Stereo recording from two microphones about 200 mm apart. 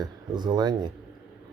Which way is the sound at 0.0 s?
20° right (ahead or behind).